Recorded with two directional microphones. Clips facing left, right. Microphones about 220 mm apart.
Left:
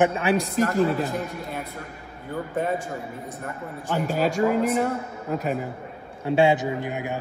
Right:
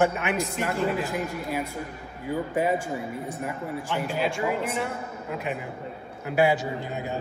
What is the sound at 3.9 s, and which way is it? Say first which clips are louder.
A man's voice: left 5 dB; 40° left (ahead or behind).